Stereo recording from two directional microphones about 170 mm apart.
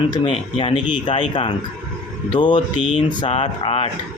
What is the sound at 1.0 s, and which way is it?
Speech, 30° left (ahead or behind).